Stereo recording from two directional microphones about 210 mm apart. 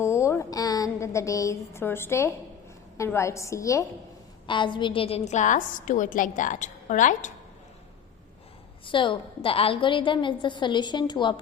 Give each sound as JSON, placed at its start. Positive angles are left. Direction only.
{"t": 0.0, "sound": "a sound", "side_deg": 15}
{"t": 3.0, "sound": "a woman's voice", "side_deg": 15}
{"t": 8.9, "sound": "a woman's voice", "side_deg": 25}